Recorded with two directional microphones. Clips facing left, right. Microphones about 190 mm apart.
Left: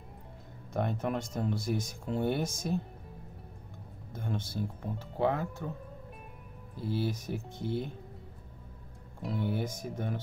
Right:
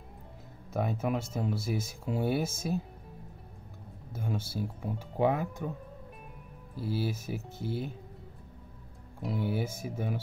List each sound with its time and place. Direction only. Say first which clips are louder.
0.7 s speech: right 1 dB; 5° right (ahead or behind)
4.1 s speech: right 1 dB; 5° right (ahead or behind)
6.8 s speech: even; 5° right (ahead or behind)
9.2 s speech: right 1 dB; 5° right (ahead or behind)